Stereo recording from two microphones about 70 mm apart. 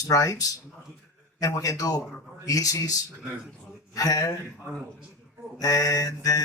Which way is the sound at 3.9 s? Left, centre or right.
Left.